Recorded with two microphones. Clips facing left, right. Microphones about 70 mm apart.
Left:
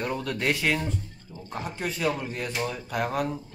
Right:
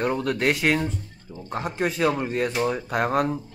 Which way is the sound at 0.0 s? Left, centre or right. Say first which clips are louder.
Right 6 dB; right.